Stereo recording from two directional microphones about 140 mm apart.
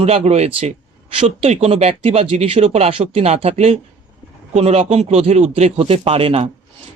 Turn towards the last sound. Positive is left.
turn(degrees=-45)  # may be behind; listen again after turning